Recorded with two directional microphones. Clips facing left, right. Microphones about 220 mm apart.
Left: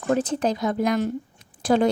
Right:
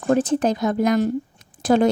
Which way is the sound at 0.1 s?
45° right (ahead or behind).